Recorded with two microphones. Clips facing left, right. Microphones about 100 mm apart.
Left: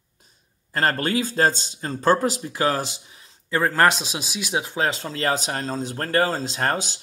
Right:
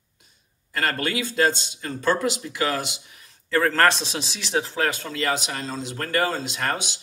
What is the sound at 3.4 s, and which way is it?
Speech, 15° left (ahead or behind).